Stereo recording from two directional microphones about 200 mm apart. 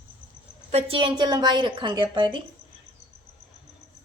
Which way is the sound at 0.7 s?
25° right (ahead or behind).